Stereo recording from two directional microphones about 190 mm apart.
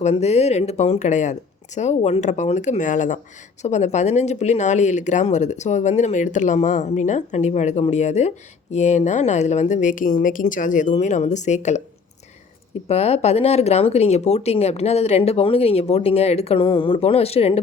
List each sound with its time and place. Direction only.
0.0 s speech: 35° left (ahead or behind)
12.9 s speech: 35° left (ahead or behind)